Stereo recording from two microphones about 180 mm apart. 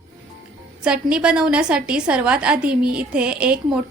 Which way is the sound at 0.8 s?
5° right (ahead or behind).